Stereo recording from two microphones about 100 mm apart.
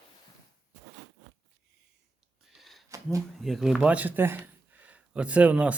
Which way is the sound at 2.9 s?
35° right (ahead or behind).